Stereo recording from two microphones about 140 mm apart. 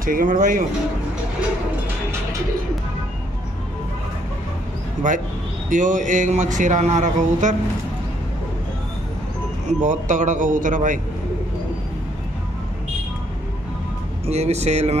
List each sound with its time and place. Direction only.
0.0 s speech: 85° right
5.0 s speech: 65° right (ahead or behind)
9.8 s speech: 60° right (ahead or behind)
14.2 s speech: 50° right (ahead or behind)